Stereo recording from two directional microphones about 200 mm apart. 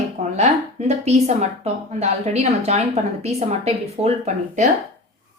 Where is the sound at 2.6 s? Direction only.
35° right (ahead or behind).